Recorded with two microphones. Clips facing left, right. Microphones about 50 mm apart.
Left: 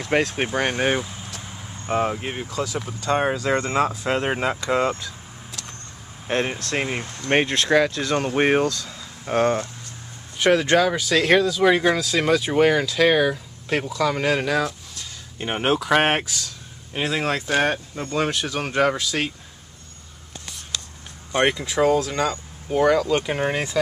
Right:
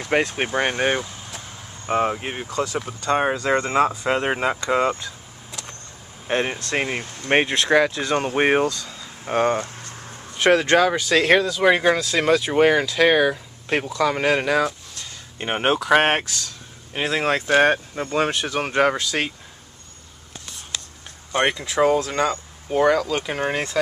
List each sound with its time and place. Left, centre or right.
0.0 s speech: centre
1.9 s speech: centre
16.9 s speech: centre
21.3 s speech: centre
21.7 s speech: centre
22.7 s speech: centre
23.1 s speech: centre